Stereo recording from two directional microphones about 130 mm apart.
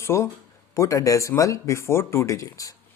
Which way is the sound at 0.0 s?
20° left (ahead or behind).